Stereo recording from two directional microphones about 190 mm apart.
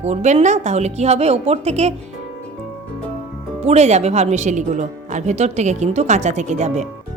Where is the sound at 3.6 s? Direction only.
35° right (ahead or behind).